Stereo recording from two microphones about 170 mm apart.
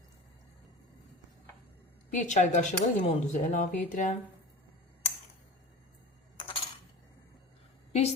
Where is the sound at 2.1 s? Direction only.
45° left (ahead or behind).